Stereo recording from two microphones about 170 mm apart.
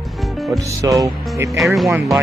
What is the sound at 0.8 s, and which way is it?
Music, 20° right (ahead or behind).